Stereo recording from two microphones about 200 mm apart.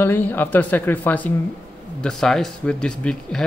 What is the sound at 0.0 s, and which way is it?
Speech, 10° left (ahead or behind).